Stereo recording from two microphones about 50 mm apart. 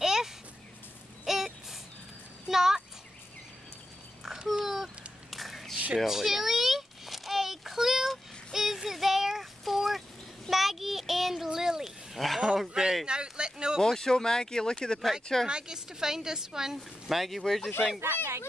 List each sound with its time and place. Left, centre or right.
0.0 s a sound: centre
2.4 s a child's voice: centre
4.2 s babbling: centre
4.6 s cat: centre
5.9 s a sound: centre
8.5 s child singing: centre
10.5 s goat: centre
12.5 s a sound: centre
13.7 s speech: centre
15.4 s speech: centre
18.0 s speech: right